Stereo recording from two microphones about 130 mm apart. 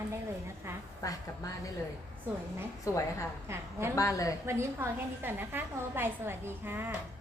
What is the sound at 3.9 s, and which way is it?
Speech, 25° left (ahead or behind).